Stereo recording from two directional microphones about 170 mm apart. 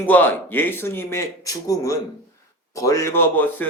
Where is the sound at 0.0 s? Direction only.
10° left (ahead or behind).